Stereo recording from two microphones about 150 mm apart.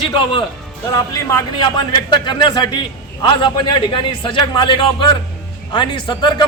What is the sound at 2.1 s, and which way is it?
A man's voice, 30° left (ahead or behind).